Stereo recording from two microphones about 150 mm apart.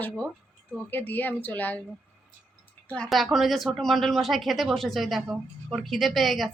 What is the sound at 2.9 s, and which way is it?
Speech, 5° left (ahead or behind).